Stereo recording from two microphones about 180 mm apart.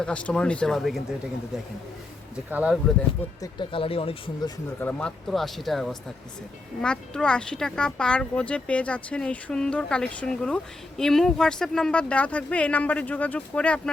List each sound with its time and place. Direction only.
0.0 s speech: 5° left (ahead or behind)
2.3 s speech: 5° right (ahead or behind)
3.4 s speech: 30° left (ahead or behind)
4.8 s speech: 5° left (ahead or behind)